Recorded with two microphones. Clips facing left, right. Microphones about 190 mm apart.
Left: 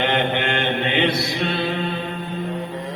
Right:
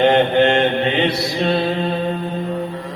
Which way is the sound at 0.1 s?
35° right (ahead or behind).